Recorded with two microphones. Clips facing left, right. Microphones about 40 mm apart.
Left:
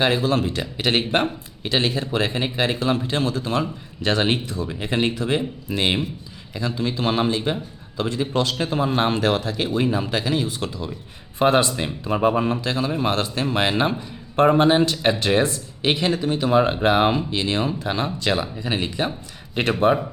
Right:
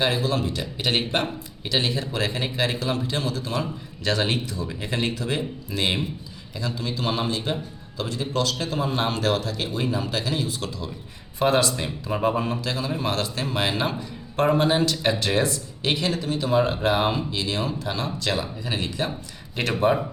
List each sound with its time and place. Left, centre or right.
0.0 s speech: left